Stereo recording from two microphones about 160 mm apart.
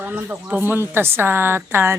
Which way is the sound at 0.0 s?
10° right (ahead or behind).